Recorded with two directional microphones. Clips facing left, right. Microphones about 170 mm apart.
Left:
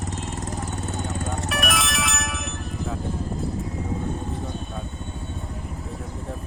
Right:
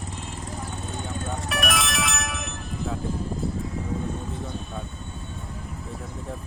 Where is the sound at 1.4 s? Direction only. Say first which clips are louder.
Even; centre (ahead or behind).